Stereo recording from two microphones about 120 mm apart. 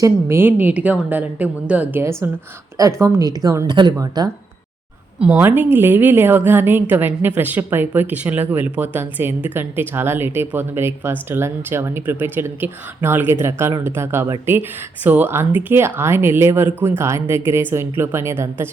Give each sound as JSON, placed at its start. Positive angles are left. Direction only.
{"t": 0.0, "sound": "a woman's voice", "side_deg": -20}
{"t": 5.2, "sound": "a woman's voice", "side_deg": -15}